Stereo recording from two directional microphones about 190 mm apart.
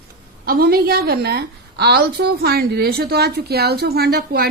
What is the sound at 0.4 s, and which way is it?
A woman's voice, 50° right (ahead or behind).